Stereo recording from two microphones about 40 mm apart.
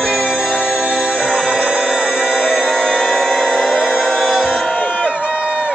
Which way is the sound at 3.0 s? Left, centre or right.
Centre.